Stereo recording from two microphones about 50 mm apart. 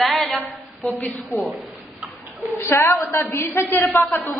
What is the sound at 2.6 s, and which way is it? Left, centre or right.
A woman's voice, left.